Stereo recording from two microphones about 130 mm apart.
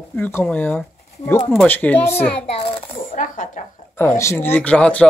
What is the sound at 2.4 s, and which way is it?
Speech, 50° left (ahead or behind).